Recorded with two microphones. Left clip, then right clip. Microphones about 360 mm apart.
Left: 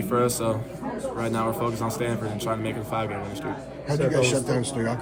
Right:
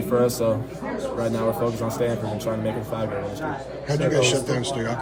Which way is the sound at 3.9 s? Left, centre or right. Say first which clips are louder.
Right 2 dB; centre.